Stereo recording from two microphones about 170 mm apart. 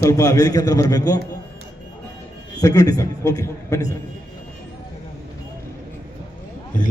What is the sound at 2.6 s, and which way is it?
A man's voice, 20° left (ahead or behind).